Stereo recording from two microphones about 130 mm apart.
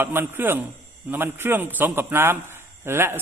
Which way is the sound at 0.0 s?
15° right (ahead or behind).